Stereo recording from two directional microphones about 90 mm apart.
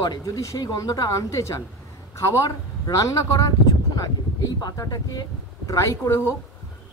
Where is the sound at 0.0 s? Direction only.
45° left (ahead or behind).